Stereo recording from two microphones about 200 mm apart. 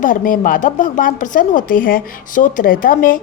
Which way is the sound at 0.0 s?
40° left (ahead or behind).